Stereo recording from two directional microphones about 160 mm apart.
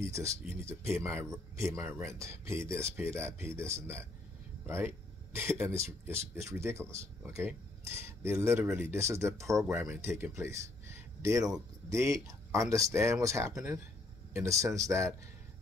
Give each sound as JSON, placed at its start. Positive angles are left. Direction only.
{"t": 0.0, "sound": "speech", "side_deg": -20}